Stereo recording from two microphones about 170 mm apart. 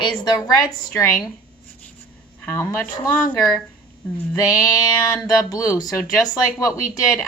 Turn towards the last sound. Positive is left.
turn(degrees=20)  # may be behind; listen again after turning